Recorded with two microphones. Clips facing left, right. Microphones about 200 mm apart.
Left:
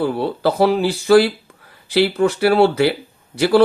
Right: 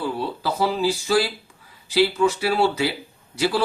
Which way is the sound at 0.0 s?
60° left (ahead or behind).